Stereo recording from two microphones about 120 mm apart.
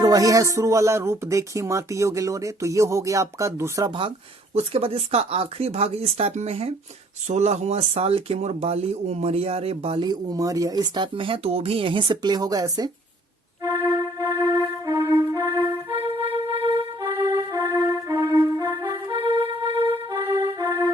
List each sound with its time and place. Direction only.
0.0 s speech: 30° right (ahead or behind)
4.5 s speech: 55° right (ahead or behind)
7.3 s speech: 70° right (ahead or behind); by 10.0 s 55° right (ahead or behind)
10.0 s speech: 35° right (ahead or behind)
13.6 s music: 30° right (ahead or behind)
16.6 s music: 40° right (ahead or behind)